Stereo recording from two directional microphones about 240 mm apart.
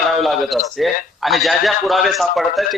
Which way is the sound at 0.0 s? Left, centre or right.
Centre.